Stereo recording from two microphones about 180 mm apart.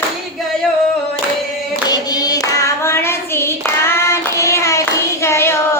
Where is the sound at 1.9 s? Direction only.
20° left (ahead or behind).